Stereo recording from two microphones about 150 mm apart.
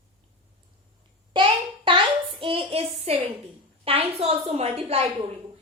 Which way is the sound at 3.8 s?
40° right (ahead or behind).